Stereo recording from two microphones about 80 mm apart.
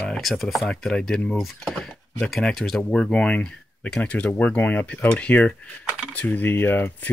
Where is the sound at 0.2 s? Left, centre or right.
Centre.